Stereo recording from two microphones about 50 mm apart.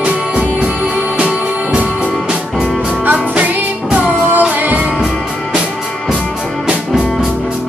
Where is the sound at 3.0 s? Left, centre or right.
Right.